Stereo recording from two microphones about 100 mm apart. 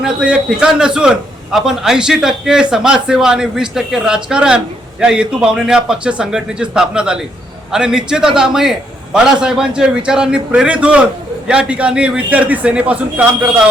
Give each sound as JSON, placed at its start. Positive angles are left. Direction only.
{"t": 0.0, "sound": "a man's voice", "side_deg": -10}